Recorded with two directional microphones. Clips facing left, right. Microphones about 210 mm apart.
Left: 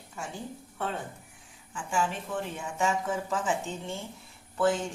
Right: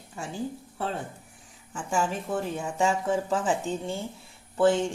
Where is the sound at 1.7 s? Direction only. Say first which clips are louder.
Right 2 dB; 45° right (ahead or behind).